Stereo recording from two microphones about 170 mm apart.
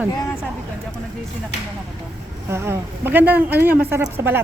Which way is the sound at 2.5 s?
15° right (ahead or behind).